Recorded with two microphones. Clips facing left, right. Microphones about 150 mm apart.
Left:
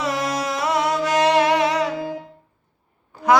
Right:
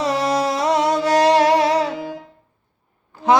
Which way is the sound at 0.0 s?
30° right (ahead or behind).